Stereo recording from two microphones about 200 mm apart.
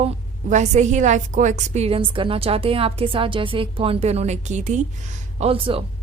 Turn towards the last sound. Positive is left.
turn(degrees=-25)  # may be behind; listen again after turning